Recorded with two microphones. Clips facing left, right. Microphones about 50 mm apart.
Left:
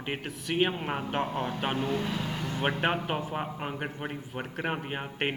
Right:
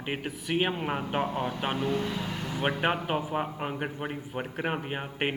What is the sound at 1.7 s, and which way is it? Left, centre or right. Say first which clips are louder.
Speech: right 2 dB; left.